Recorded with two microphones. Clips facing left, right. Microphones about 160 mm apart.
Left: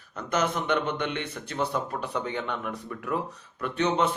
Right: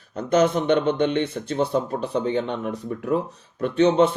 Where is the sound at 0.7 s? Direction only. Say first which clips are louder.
Right 8 dB; 30° right (ahead or behind).